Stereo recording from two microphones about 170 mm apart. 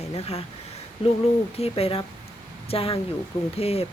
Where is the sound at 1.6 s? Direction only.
35° left (ahead or behind).